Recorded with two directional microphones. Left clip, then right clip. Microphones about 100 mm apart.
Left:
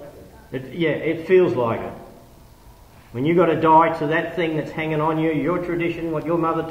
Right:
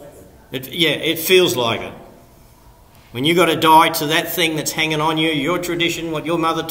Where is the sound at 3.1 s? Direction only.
45° right (ahead or behind).